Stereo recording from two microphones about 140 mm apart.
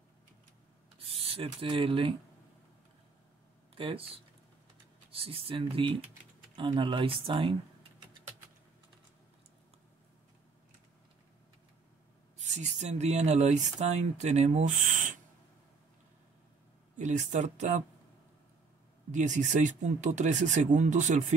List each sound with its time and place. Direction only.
0.9 s speech: 40° right (ahead or behind)
3.7 s speech: 40° right (ahead or behind)
12.4 s speech: 55° right (ahead or behind)
16.9 s speech: 60° right (ahead or behind)
19.1 s speech: 60° right (ahead or behind)